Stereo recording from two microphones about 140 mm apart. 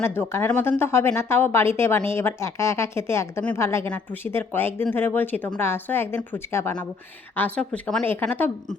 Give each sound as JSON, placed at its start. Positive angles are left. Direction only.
{"t": 0.0, "sound": "a woman's voice", "side_deg": 15}